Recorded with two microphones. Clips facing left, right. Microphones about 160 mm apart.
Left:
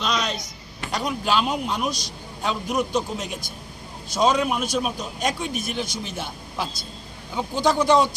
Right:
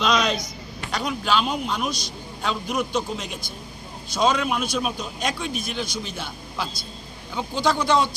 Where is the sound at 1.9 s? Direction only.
40° left (ahead or behind).